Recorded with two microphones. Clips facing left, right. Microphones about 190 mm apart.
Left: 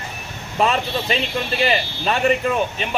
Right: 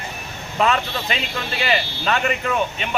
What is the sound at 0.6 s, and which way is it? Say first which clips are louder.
Speech: left 1 dB; 30° left (ahead or behind).